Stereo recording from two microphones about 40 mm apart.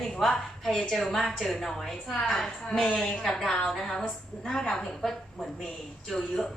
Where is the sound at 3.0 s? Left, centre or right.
Centre.